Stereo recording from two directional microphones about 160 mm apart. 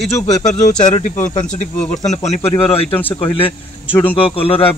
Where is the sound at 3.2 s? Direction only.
35° left (ahead or behind).